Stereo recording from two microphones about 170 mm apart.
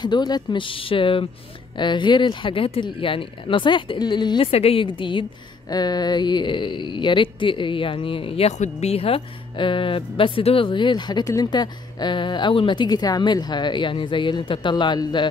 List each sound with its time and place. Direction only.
0.0 s speech: 25° left (ahead or behind)